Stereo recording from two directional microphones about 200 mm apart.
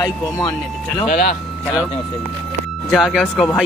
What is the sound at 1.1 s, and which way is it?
Speech, 50° left (ahead or behind).